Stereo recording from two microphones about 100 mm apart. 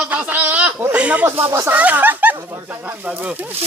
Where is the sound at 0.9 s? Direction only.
15° right (ahead or behind).